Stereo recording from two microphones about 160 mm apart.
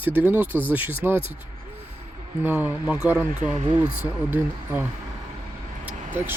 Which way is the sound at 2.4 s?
10° right (ahead or behind).